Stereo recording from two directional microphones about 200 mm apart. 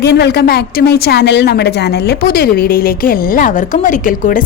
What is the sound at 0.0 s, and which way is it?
A woman's voice, 55° left (ahead or behind).